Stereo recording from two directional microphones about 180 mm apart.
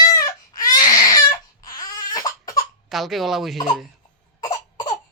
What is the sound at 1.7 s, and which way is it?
Crying, 20° left (ahead or behind).